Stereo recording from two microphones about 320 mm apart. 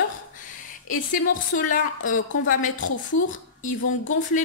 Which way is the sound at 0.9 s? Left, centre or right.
Left.